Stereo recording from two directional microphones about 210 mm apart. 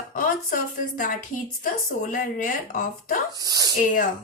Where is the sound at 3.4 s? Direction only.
15° right (ahead or behind).